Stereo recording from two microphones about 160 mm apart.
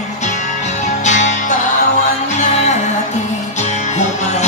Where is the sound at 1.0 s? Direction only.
50° left (ahead or behind).